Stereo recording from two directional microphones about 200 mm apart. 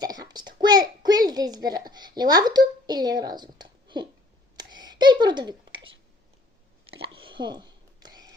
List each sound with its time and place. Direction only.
0.0 s a child's voice: 20° right (ahead or behind)
4.5 s a sound: 20° right (ahead or behind)
6.9 s whispering: 25° right (ahead or behind)